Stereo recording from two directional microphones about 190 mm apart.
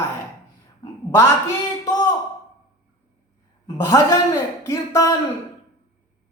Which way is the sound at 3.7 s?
15° left (ahead or behind).